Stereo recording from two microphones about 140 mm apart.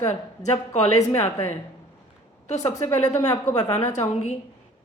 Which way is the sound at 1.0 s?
15° left (ahead or behind).